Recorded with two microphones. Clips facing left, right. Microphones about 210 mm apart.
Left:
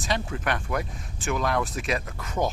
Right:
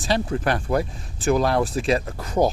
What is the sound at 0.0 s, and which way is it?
Speech, 35° right (ahead or behind).